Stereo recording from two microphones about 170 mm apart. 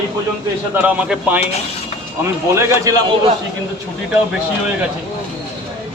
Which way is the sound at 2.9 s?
20° right (ahead or behind).